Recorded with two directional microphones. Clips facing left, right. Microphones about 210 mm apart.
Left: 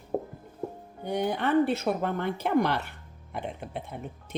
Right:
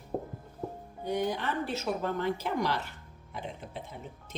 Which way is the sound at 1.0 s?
60° left (ahead or behind).